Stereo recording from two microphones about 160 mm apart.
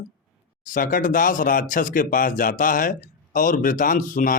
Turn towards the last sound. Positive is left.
turn(degrees=60)  # may be behind; listen again after turning